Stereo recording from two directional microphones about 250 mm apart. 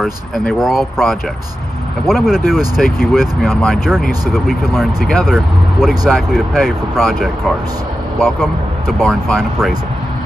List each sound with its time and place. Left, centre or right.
0.0 s speech: centre